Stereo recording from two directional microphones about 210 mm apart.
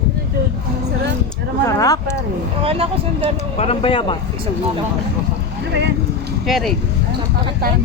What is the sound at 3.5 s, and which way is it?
Speech, 25° left (ahead or behind).